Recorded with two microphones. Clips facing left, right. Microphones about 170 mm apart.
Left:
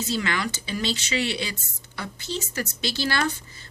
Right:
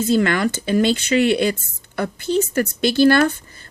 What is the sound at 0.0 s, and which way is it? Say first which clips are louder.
Speech: right 10 dB; 50° right (ahead or behind).